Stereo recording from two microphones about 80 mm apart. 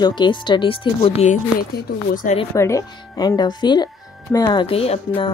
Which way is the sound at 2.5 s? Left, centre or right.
Left.